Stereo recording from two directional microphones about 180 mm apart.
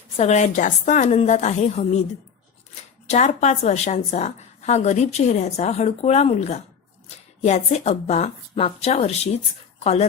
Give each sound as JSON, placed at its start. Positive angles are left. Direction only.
{"t": 0.2, "sound": "a woman's voice", "side_deg": 40}
{"t": 3.1, "sound": "a woman's voice", "side_deg": 40}